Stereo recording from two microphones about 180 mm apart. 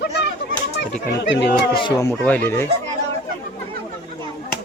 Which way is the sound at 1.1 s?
75° left (ahead or behind).